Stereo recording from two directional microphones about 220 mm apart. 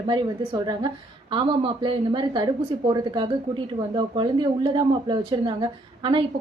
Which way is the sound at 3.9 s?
20° right (ahead or behind).